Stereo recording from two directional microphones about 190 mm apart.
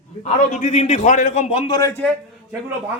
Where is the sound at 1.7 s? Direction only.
15° left (ahead or behind).